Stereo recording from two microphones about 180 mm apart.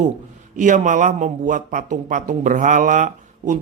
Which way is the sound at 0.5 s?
45° right (ahead or behind).